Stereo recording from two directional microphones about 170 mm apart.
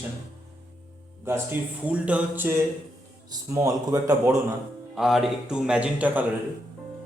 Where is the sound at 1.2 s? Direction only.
15° right (ahead or behind).